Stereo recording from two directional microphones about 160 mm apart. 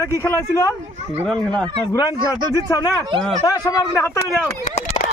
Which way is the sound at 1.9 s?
25° left (ahead or behind).